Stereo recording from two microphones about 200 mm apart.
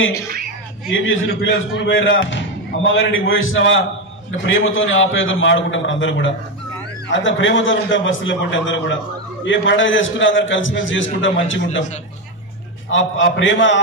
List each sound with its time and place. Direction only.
0.9 s speech: 75° left (ahead or behind)
12.9 s speech: 70° left (ahead or behind)